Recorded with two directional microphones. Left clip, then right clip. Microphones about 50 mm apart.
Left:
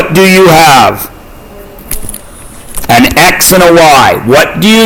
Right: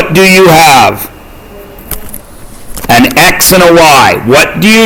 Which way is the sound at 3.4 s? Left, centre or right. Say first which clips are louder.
Even; right.